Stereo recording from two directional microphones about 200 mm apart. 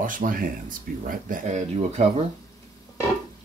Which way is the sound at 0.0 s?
45° right (ahead or behind).